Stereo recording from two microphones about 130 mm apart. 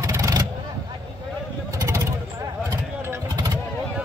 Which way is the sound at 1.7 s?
25° right (ahead or behind).